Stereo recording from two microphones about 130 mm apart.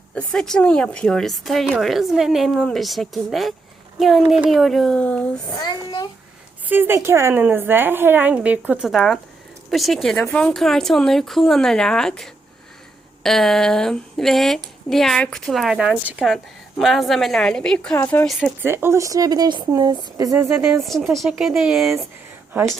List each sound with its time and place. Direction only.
0.1 s speech: 5° left (ahead or behind)
5.5 s a child's voice: 30° left (ahead or behind)
6.7 s a woman's voice: 15° right (ahead or behind); by 18.3 s 15° left (ahead or behind)
18.6 s speech: 20° right (ahead or behind)
20.8 s speech: centre (ahead or behind)